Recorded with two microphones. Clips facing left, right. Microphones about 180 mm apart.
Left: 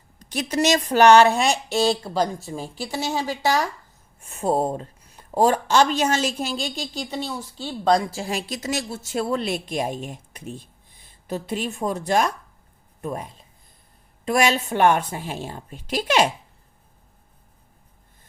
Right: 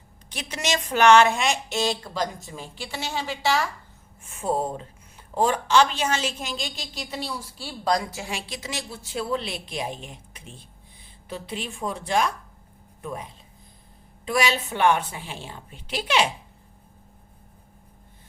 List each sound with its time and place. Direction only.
0.2 s a woman's voice: 40° left (ahead or behind)
14.3 s a woman's voice: 45° left (ahead or behind)